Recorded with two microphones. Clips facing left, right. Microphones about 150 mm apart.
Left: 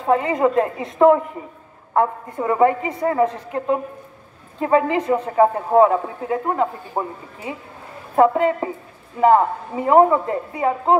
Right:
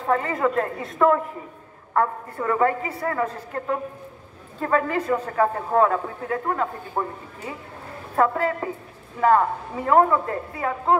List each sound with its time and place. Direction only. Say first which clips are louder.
0.0 s a woman's voice: left 5 dB; 20° left (ahead or behind)